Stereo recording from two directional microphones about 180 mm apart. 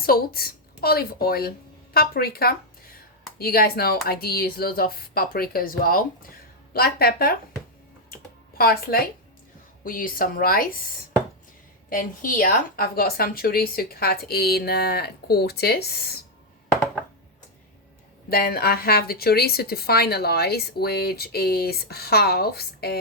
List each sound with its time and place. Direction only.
0.0 s speech: 55° left (ahead or behind)
8.5 s a woman's voice: 55° left (ahead or behind)
11.9 s speech: 50° left (ahead or behind)
18.3 s speech: 60° left (ahead or behind)